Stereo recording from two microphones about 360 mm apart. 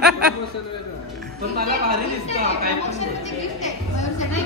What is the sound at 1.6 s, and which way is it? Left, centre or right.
A woman's voice, right.